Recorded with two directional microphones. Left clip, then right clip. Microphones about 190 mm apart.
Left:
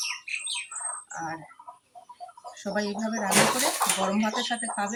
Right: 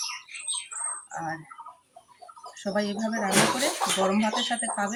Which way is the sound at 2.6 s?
5° right (ahead or behind).